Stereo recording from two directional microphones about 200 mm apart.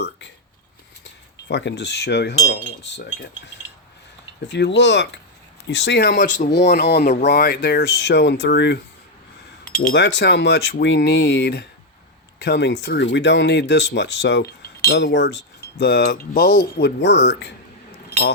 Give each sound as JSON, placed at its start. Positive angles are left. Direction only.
{"t": 1.5, "sound": "speech", "side_deg": 60}
{"t": 9.6, "sound": "speech", "side_deg": 45}